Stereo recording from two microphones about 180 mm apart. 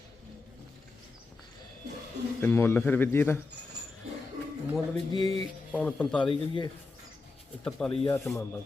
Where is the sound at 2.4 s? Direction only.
10° left (ahead or behind).